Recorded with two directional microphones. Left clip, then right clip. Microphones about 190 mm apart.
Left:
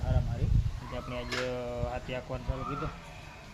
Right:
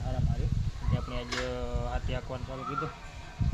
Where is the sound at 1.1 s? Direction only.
20° right (ahead or behind).